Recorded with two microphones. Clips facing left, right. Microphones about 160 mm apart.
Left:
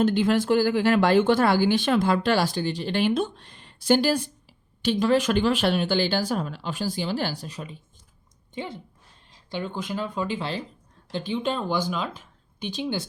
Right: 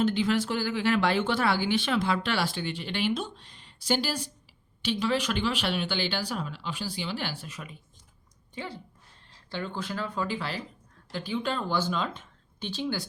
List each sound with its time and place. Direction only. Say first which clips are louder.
0.0 s speech: left 4 dB; 50° left (ahead or behind); by 7.8 s 30° left (ahead or behind)
8.5 s speech: left 4 dB; 20° left (ahead or behind)